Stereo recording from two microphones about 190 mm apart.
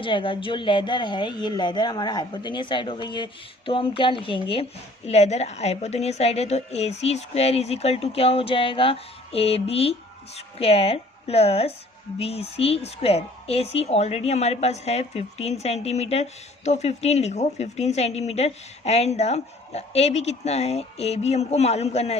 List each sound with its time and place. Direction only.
0.0 s a woman's voice: 25° left (ahead or behind)